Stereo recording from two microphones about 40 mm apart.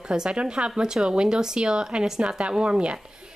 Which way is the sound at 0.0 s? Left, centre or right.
Right.